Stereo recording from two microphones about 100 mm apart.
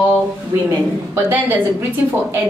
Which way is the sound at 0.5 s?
30° right (ahead or behind).